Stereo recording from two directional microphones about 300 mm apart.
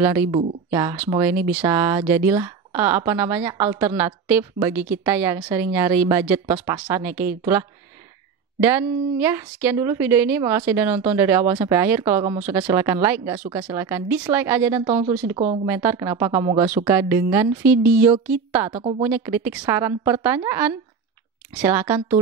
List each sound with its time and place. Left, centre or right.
0.0 s a woman's voice: centre
8.6 s a woman's voice: centre
18.7 s a woman's voice: centre
19.0 s a woman's voice: centre